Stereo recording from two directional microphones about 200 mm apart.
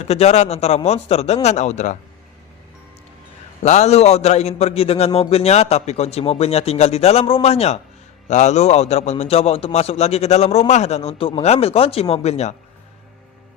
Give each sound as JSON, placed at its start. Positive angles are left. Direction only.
{"t": 0.0, "sound": "a man's voice", "side_deg": 35}
{"t": 3.6, "sound": "a man's voice", "side_deg": 35}